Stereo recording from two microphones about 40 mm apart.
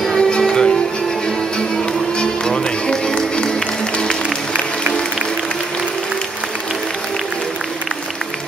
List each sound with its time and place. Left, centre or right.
0.2 s music: centre
2.1 s music: left